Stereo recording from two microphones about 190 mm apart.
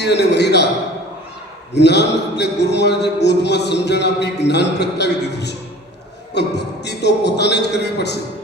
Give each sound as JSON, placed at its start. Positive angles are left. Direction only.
{"t": 0.0, "sound": "a man's voice", "side_deg": 65}
{"t": 1.7, "sound": "a man's voice", "side_deg": 60}